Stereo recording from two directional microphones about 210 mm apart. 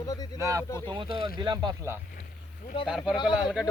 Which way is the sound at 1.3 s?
20° right (ahead or behind).